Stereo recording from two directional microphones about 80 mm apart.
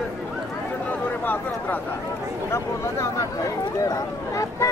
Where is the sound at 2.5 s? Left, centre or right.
Left.